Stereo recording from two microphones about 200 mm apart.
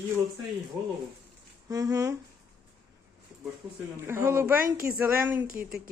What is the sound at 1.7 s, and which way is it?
Speech, 15° right (ahead or behind).